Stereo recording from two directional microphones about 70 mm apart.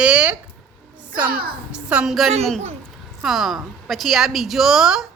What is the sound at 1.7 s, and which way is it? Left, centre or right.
Speech, centre.